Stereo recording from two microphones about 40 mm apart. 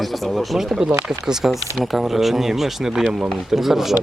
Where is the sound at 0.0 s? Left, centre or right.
Centre.